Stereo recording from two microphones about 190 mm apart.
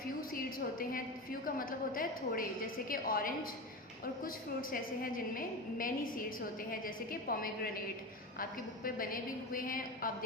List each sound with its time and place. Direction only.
0.8 s a woman's voice: 50° left (ahead or behind)